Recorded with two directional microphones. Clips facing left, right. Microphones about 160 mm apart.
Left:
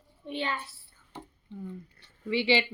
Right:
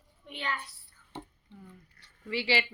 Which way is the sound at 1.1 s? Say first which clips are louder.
Right 1 dB; 30° right (ahead or behind).